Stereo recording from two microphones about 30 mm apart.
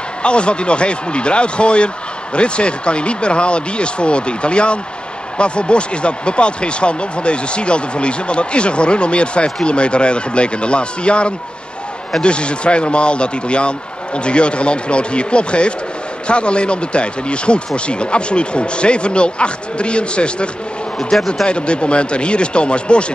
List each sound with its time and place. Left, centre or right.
0.2 s speech: left
21.1 s speech: centre
21.5 s speech: left